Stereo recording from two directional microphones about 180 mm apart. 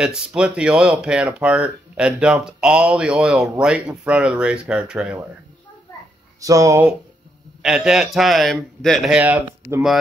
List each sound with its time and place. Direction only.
0.0 s speech: 5° right (ahead or behind)
6.4 s speech: 20° right (ahead or behind)
7.6 s speech: 5° right (ahead or behind)